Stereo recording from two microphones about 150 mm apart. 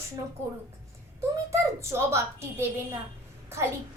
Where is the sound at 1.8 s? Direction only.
20° right (ahead or behind).